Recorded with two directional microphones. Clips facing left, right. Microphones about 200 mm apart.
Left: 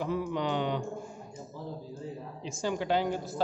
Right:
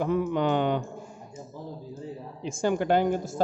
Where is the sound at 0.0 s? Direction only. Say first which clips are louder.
Right 6 dB; 55° right (ahead or behind).